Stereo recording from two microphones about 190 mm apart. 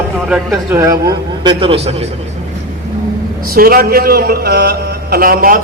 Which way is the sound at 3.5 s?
50° right (ahead or behind).